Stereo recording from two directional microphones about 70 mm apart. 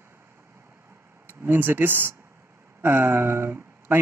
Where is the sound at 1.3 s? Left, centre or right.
Right.